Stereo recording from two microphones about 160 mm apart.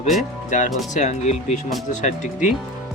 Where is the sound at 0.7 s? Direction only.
Centre (ahead or behind).